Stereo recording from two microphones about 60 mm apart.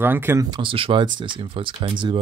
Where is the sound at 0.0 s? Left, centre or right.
Right.